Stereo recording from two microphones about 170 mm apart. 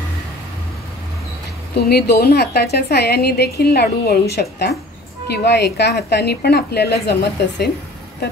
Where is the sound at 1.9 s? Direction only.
65° left (ahead or behind).